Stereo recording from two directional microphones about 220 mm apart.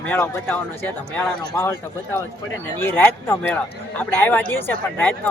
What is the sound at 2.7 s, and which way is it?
Speech, 10° left (ahead or behind).